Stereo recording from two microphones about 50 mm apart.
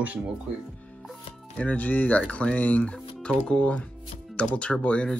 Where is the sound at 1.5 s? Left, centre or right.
Left.